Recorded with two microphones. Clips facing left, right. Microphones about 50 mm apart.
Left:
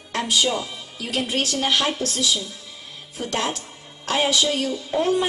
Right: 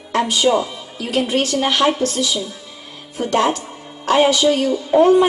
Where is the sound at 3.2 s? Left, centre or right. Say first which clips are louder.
Right 9 dB; right.